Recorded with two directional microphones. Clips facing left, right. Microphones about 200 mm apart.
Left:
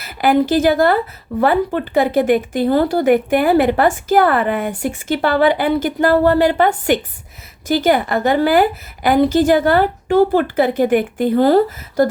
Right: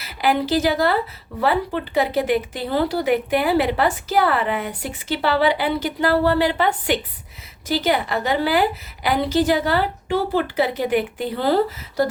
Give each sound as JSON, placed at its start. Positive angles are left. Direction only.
{"t": 0.0, "sound": "speech", "side_deg": 50}